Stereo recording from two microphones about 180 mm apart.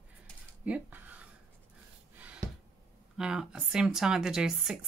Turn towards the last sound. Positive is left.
turn(degrees=-5)  # may be behind; listen again after turning